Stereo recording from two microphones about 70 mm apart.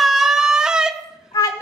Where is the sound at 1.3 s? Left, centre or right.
Left.